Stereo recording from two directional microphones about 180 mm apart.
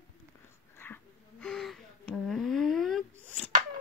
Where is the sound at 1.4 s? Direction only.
Centre (ahead or behind).